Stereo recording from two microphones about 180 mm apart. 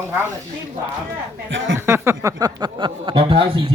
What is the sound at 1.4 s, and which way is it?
Speech, 90° right.